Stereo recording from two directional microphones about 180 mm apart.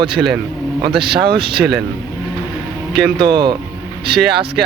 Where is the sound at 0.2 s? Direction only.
10° right (ahead or behind).